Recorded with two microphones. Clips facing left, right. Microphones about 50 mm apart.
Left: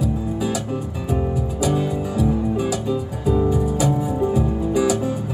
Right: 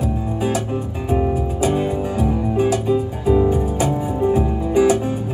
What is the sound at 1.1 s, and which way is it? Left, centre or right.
Music, right.